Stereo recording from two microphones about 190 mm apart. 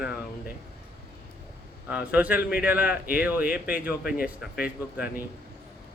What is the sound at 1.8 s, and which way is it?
A man's voice, 10° right (ahead or behind).